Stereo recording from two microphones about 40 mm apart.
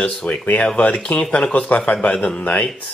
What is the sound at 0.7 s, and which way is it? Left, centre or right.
Speech, left.